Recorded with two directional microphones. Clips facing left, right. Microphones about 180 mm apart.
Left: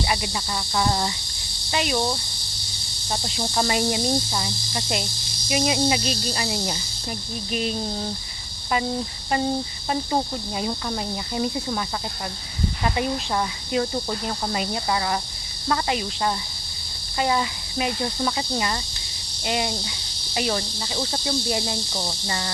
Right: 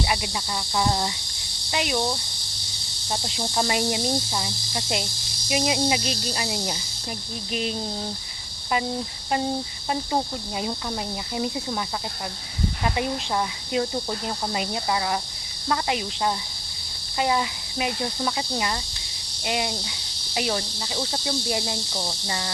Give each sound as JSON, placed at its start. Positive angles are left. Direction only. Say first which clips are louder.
{"t": 0.1, "sound": "speech", "louder": "left 1 dB", "side_deg": -10}
{"t": 3.1, "sound": "speech", "louder": "left 1 dB", "side_deg": -15}
{"t": 10.6, "sound": "speech", "louder": "left 1 dB", "side_deg": -10}
{"t": 12.8, "sound": "speech", "louder": "left 2 dB", "side_deg": -10}
{"t": 17.2, "sound": "cricket", "louder": "left 1 dB", "side_deg": -10}